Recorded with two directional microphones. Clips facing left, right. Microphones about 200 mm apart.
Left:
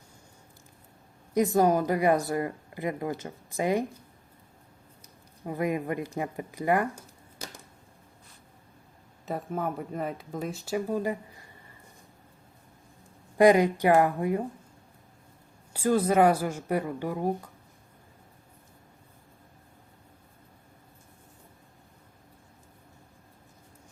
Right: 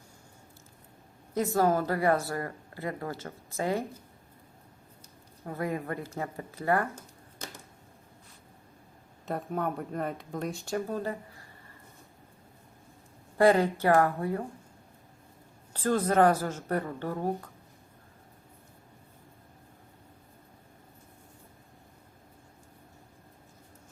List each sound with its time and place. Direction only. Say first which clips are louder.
1.3 s speech: left 3 dB; 15° left (ahead or behind)
5.5 s speech: left 4 dB; 15° left (ahead or behind)
9.2 s speech: even; centre (ahead or behind)
13.4 s speech: left 3 dB; 15° left (ahead or behind)
15.7 s speech: left 2 dB; 10° left (ahead or behind)